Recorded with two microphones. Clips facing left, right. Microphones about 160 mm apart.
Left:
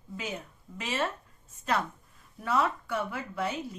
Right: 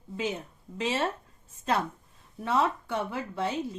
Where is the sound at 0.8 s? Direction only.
25° right (ahead or behind).